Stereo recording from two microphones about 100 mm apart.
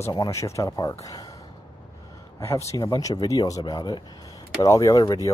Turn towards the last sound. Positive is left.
turn(degrees=35)  # may be behind; listen again after turning